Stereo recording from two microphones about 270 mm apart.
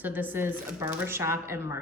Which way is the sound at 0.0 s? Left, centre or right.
Centre.